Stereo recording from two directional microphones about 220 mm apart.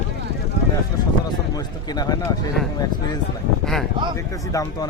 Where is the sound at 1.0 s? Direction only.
20° left (ahead or behind).